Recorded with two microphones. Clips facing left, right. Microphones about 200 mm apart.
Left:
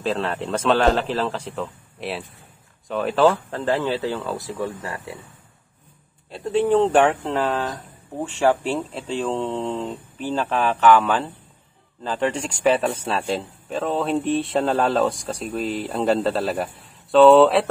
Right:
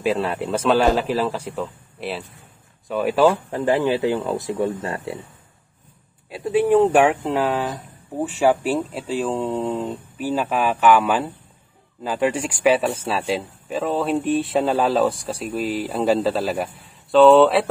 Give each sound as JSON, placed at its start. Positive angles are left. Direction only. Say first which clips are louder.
{"t": 0.0, "sound": "speech", "louder": "right 3 dB", "side_deg": -10}
{"t": 6.3, "sound": "a man's voice", "louder": "right 2 dB", "side_deg": -10}